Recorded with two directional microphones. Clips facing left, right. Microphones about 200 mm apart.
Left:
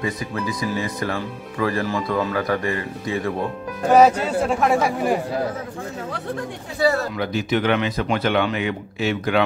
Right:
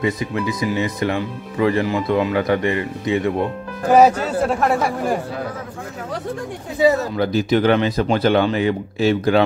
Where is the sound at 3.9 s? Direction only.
5° right (ahead or behind).